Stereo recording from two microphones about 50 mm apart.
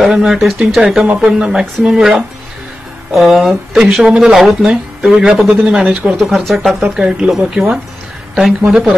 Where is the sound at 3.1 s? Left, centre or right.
Centre.